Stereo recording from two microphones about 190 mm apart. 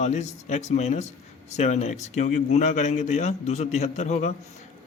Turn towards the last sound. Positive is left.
turn(degrees=35)  # may be behind; listen again after turning